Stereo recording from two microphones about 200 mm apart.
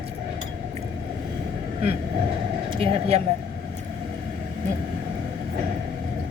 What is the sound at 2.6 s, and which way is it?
Speech, 25° right (ahead or behind).